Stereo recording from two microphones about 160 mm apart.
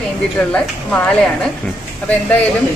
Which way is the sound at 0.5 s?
5° left (ahead or behind).